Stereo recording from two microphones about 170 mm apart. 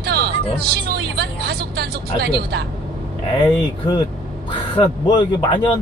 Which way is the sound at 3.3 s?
25° left (ahead or behind).